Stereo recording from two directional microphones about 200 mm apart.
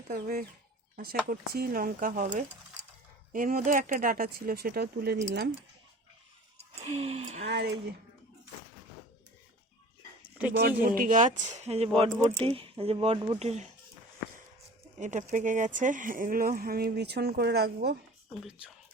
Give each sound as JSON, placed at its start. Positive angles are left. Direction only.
{"t": 0.1, "sound": "speech", "side_deg": -50}
{"t": 6.6, "sound": "speech", "side_deg": -30}
{"t": 7.4, "sound": "speech", "side_deg": -55}
{"t": 10.6, "sound": "speech", "side_deg": -45}
{"t": 14.9, "sound": "speech", "side_deg": -35}